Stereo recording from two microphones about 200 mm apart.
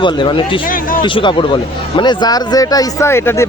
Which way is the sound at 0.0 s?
25° left (ahead or behind).